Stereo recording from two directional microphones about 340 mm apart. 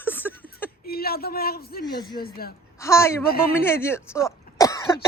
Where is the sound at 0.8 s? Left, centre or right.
Left.